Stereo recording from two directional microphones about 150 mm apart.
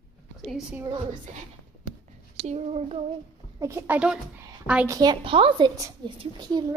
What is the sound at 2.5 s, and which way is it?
Child singing, 45° right (ahead or behind).